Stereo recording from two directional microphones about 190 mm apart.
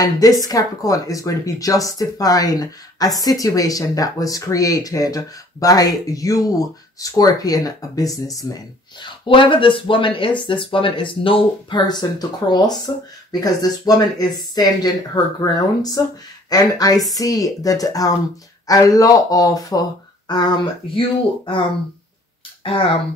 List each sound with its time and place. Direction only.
0.0 s speech: 20° left (ahead or behind)
22.6 s speech: 30° left (ahead or behind)